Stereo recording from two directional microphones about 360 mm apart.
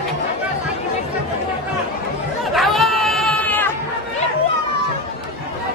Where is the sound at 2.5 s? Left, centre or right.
Centre.